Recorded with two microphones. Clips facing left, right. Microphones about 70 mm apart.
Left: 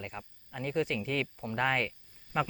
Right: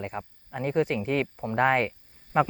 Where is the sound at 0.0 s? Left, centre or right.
Right.